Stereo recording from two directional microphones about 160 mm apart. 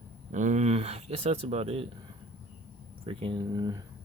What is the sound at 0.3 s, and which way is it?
Speech, 50° right (ahead or behind).